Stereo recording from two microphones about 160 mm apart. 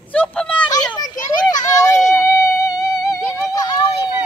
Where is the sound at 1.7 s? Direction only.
20° left (ahead or behind).